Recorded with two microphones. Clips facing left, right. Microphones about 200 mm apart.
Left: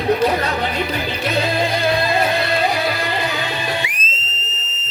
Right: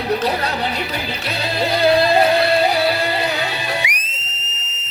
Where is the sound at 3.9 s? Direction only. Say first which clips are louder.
Left 1 dB; 70° right (ahead or behind).